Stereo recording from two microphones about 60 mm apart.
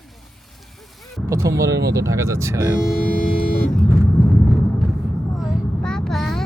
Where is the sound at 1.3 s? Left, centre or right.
Right.